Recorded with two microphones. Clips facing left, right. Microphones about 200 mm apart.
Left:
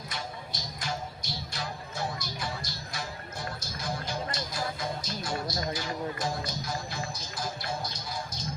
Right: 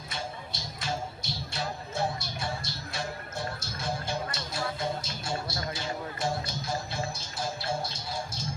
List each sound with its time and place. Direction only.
0.5 s music: 25° right (ahead or behind)